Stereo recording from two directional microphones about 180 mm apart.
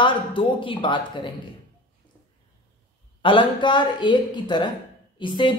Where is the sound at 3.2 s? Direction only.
25° left (ahead or behind).